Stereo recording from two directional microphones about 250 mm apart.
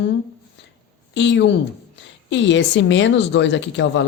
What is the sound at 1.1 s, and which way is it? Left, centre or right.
A woman's voice, left.